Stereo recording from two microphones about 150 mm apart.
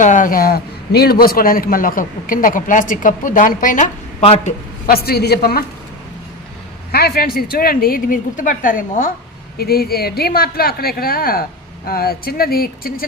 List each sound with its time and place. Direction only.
0.0 s a man's voice: 55° left (ahead or behind)
4.2 s speech: 45° left (ahead or behind)
4.9 s a woman's voice: 90° left
6.9 s a woman's voice: 90° left; by 9.1 s 65° left (ahead or behind)
9.6 s a woman's voice: 90° left